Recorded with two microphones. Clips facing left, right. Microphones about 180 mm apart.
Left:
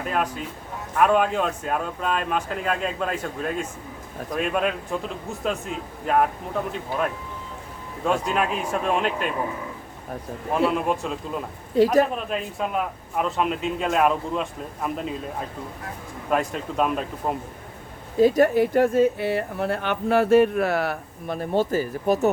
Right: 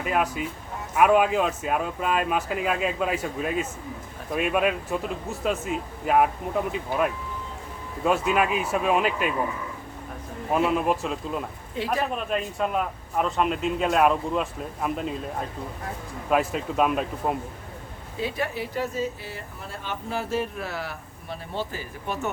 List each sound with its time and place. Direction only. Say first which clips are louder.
0.0 s a man's voice: right 1 dB; 5° right (ahead or behind)
10.5 s a man's voice: even; centre (ahead or behind)
11.7 s a man's voice: left 10 dB; 40° left (ahead or behind)
12.1 s a man's voice: even; centre (ahead or behind)
18.2 s speech: left 12 dB; 45° left (ahead or behind)